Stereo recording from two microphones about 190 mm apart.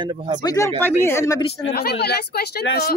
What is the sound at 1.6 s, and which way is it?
Speech, 60° left (ahead or behind).